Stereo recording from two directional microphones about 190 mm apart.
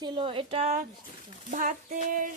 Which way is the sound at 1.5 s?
40° right (ahead or behind).